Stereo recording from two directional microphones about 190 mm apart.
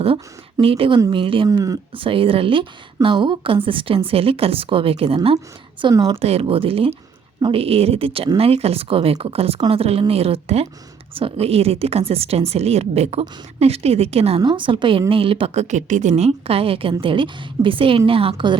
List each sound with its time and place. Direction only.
0.0 s speech: 30° right (ahead or behind)
6.2 s a woman's voice: 30° right (ahead or behind)